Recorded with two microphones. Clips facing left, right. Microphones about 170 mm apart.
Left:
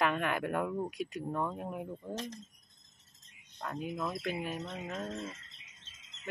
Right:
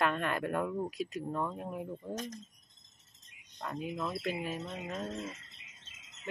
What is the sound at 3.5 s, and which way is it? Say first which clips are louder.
Speech: even; centre (ahead or behind).